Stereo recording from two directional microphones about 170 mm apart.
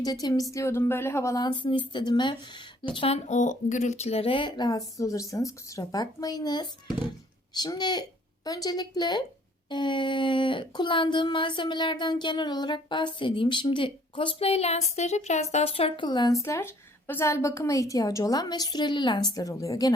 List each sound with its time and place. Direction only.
0.0 s speech: 20° left (ahead or behind)